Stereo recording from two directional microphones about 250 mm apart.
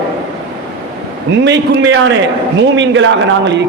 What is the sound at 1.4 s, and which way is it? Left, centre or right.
A man's voice, right.